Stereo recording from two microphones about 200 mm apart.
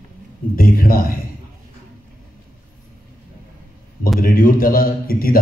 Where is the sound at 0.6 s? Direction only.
45° left (ahead or behind).